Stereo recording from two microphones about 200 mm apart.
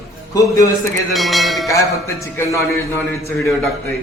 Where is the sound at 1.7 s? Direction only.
15° left (ahead or behind).